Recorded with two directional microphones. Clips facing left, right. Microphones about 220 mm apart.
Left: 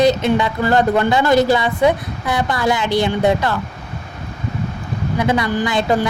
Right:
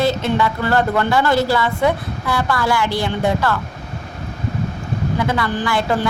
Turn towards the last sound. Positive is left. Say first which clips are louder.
# left 2 dB
turn(degrees=20)  # may be behind; listen again after turning